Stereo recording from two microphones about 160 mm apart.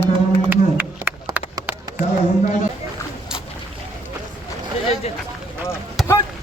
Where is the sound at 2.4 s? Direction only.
55° left (ahead or behind).